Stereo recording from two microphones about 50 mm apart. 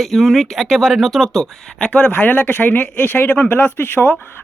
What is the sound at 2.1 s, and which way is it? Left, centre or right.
Speech, left.